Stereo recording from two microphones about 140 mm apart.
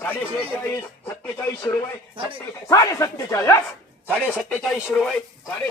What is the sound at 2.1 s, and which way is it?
Speech, 40° right (ahead or behind).